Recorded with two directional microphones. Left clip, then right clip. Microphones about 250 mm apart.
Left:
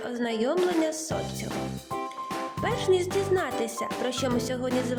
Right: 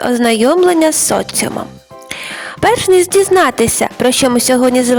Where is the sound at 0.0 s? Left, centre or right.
Right.